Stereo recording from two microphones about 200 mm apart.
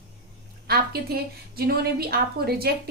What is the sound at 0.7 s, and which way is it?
A woman's voice, 50° right (ahead or behind).